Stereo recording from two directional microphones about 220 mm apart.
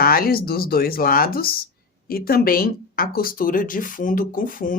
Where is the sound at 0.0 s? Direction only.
45° left (ahead or behind).